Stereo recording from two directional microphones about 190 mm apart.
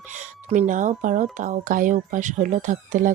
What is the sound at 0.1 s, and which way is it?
Speech, 40° right (ahead or behind).